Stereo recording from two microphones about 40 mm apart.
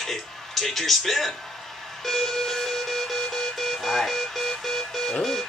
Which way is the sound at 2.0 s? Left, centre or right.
Centre.